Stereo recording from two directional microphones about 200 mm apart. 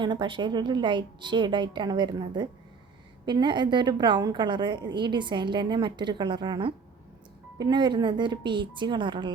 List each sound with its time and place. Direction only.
0.0 s a woman's voice: 25° right (ahead or behind)